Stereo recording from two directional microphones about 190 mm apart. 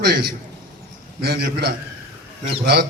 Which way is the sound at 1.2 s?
55° right (ahead or behind).